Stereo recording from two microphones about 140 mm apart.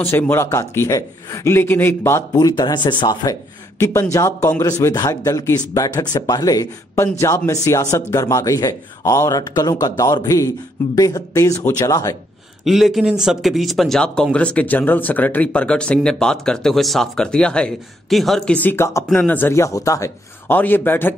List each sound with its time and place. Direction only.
0.0 s a man's voice: 15° left (ahead or behind); by 3.3 s 30° left (ahead or behind)
3.8 s a man's voice: 20° left (ahead or behind)
12.6 s a man's voice: centre (ahead or behind); by 21.1 s 15° left (ahead or behind)